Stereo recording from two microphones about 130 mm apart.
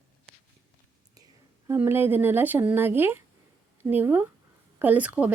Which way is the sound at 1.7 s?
20° right (ahead or behind).